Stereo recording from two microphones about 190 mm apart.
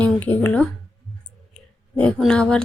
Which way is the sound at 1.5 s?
5° left (ahead or behind).